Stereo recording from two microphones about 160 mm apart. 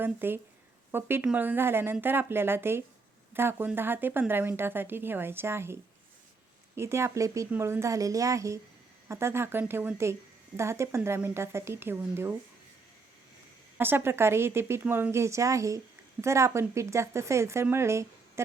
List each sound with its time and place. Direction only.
0.0 s a woman's voice: 15° right (ahead or behind)
13.7 s speech: 15° right (ahead or behind)